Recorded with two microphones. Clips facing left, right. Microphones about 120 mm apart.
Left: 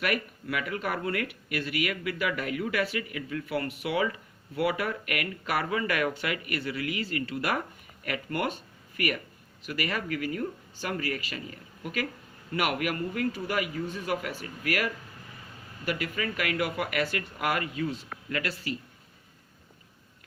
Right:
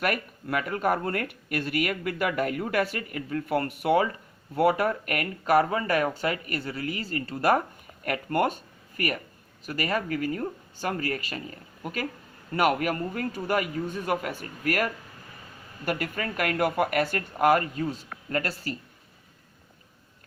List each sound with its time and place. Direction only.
0.0 s speech: 45° right (ahead or behind)